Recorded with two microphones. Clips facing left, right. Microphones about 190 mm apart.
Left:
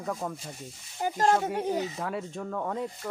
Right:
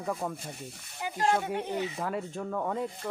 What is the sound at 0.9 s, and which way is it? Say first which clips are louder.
Speech: left 4 dB; 45° left (ahead or behind).